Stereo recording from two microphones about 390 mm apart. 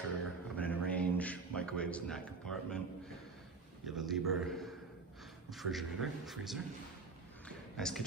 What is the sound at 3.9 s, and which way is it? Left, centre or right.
A man's voice, centre.